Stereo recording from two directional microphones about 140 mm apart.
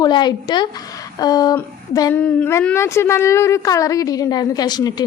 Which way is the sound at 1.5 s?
25° left (ahead or behind).